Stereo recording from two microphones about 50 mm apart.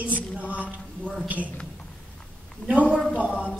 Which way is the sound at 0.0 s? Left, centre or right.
Right.